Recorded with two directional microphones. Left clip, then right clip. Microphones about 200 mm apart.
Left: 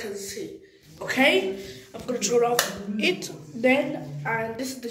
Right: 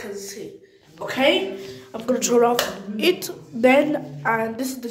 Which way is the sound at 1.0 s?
10° right (ahead or behind).